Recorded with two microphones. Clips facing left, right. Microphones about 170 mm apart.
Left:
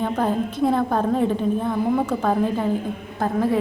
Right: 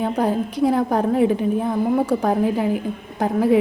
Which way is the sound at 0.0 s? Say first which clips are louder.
Right 2 dB; 10° right (ahead or behind).